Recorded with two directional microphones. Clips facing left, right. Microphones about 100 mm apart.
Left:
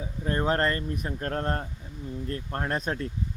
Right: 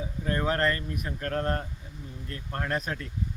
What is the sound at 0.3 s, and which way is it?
Speech, 30° left (ahead or behind).